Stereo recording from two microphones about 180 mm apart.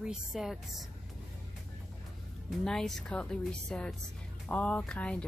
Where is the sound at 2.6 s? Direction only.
Centre (ahead or behind).